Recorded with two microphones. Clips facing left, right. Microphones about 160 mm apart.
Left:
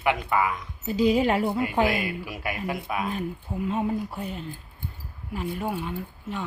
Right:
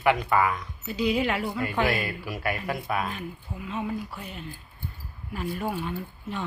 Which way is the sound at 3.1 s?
45° left (ahead or behind).